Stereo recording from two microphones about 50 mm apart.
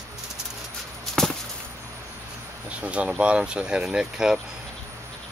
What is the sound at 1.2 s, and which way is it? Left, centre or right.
Chop, centre.